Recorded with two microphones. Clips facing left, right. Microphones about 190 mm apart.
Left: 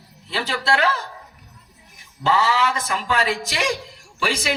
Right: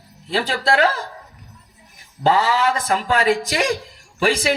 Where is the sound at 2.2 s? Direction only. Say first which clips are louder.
Right 3 dB; 50° right (ahead or behind).